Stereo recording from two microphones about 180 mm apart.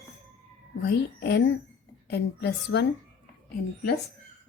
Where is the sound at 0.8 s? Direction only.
65° left (ahead or behind).